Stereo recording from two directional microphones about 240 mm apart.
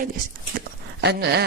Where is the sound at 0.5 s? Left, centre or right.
Right.